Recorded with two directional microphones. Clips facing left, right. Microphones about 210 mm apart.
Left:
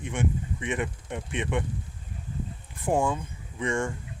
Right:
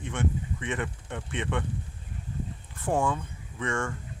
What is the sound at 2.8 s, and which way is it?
Speech, 15° left (ahead or behind).